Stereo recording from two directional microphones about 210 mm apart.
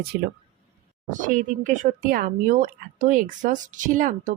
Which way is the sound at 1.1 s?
40° right (ahead or behind).